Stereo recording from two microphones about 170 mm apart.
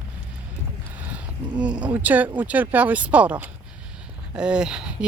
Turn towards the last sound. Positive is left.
turn(degrees=-5)  # may be behind; listen again after turning